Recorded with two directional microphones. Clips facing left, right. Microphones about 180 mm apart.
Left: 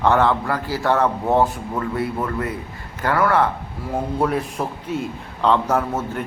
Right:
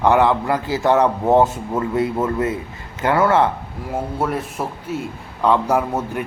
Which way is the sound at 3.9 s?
Centre (ahead or behind).